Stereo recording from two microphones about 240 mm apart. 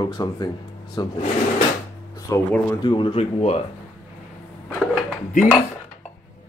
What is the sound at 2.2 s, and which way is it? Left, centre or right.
Speech, centre.